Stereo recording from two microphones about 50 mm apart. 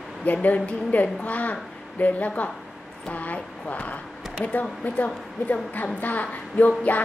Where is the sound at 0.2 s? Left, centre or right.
Left.